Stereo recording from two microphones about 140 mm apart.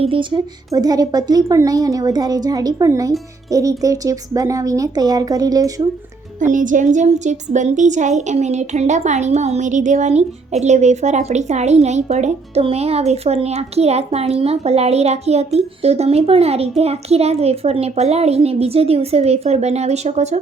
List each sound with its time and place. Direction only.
0.0 s a woman's voice: 35° right (ahead or behind)
6.4 s a woman's voice: 65° right (ahead or behind)